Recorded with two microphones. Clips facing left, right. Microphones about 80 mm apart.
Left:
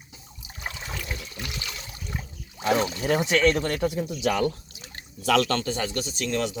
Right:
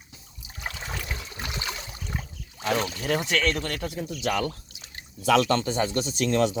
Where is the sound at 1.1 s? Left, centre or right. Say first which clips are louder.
Right 1 dB; right.